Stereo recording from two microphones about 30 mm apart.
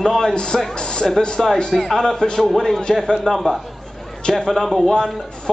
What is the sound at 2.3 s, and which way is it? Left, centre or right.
A man's voice, centre.